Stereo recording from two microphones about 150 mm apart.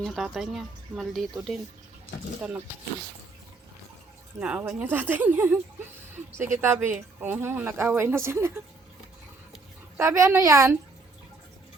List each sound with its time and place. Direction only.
0.0 s speech: centre (ahead or behind)
4.4 s a woman's voice: 10° right (ahead or behind)
10.0 s a woman's voice: 20° right (ahead or behind)